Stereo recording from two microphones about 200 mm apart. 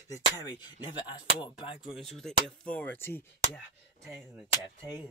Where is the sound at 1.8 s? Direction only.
Centre (ahead or behind).